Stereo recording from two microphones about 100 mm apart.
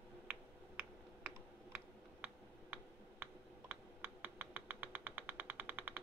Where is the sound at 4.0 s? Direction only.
15° right (ahead or behind).